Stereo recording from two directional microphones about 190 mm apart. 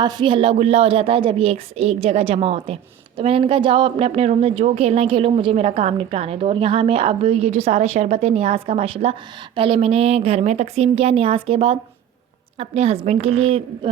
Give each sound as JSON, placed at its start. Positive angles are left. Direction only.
{"t": 0.0, "sound": "a woman's voice", "side_deg": -25}